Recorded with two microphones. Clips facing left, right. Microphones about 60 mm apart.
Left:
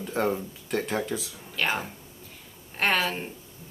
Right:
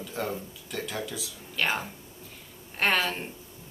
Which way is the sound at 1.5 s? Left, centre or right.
Centre.